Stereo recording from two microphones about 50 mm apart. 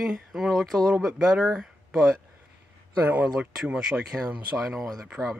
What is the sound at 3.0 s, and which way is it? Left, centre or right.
Speech, right.